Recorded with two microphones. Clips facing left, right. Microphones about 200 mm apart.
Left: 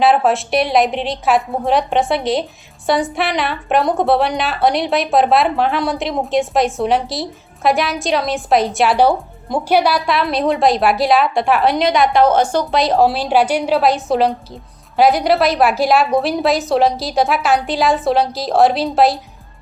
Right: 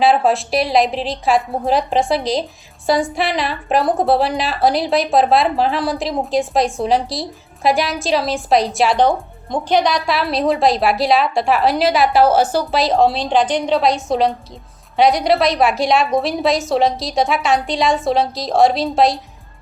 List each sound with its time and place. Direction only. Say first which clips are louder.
0.0 s a woman's voice: left 1 dB; centre (ahead or behind)